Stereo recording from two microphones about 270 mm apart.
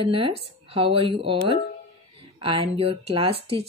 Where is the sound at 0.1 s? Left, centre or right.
Centre.